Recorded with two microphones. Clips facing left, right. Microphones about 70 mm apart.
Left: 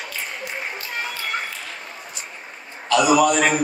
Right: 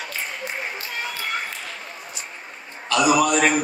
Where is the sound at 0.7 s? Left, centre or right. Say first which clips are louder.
Left 1 dB; left.